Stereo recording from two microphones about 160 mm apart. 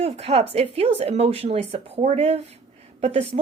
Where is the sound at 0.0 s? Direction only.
40° right (ahead or behind).